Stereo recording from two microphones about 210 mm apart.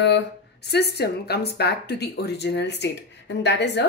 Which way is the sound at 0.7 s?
50° left (ahead or behind).